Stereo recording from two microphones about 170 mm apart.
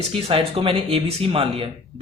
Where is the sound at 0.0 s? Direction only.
35° right (ahead or behind).